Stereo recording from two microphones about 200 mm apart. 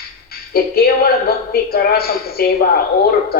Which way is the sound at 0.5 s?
50° left (ahead or behind).